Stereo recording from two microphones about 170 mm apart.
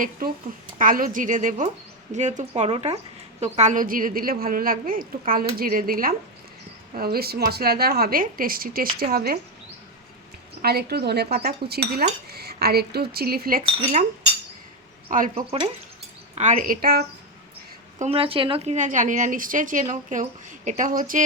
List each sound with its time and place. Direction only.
0.2 s a woman's voice: 55° right (ahead or behind)
10.6 s a woman's voice: 65° right (ahead or behind)
15.1 s speech: 50° right (ahead or behind)
15.4 s speech: 35° right (ahead or behind)
16.3 s speech: 45° right (ahead or behind); by 17.1 s 65° right (ahead or behind)
18.0 s speech: 35° right (ahead or behind); by 21.2 s 50° right (ahead or behind)